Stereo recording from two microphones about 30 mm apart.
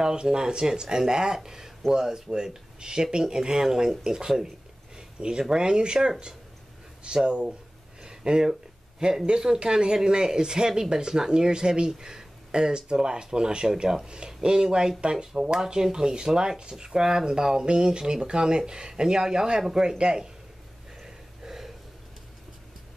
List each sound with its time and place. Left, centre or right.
0.0 s speech: right
4.9 s a sound: right
5.4 s speech: right
8.0 s a sound: right
9.2 s speech: right
21.0 s gasp: centre